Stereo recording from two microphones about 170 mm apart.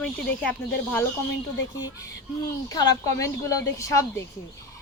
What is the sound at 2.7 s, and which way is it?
Speech, 20° left (ahead or behind).